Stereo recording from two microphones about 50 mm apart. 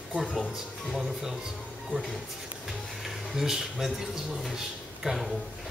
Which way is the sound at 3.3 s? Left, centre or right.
Centre.